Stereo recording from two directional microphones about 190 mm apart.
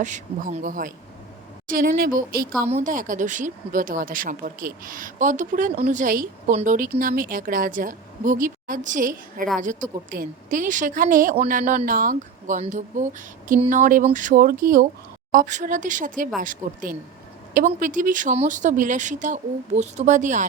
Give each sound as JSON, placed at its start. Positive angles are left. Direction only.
{"t": 0.0, "sound": "speech", "side_deg": -40}
{"t": 2.6, "sound": "speech", "side_deg": -40}